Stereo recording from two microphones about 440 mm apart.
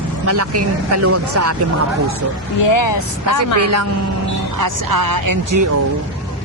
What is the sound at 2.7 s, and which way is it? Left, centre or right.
Speech, left.